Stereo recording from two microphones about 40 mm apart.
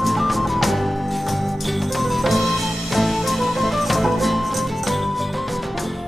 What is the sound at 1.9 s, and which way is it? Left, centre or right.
Music, centre.